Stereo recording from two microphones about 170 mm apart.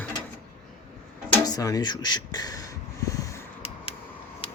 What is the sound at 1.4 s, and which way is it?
Speech, 20° left (ahead or behind).